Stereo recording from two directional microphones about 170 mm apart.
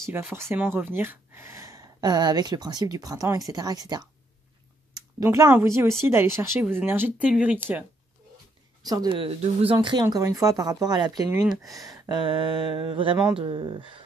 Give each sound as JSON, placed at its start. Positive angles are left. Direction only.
{"t": 0.0, "sound": "speech", "side_deg": -10}
{"t": 5.2, "sound": "speech", "side_deg": -20}
{"t": 8.8, "sound": "speech", "side_deg": -20}